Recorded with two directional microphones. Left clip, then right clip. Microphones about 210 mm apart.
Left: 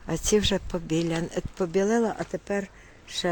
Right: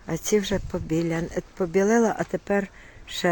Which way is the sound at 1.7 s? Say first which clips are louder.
Right 4 dB; 15° right (ahead or behind).